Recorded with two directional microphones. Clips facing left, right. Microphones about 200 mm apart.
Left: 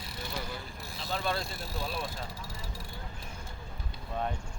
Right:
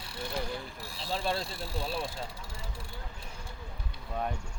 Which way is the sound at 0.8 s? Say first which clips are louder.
Left 2 dB; 30° right (ahead or behind).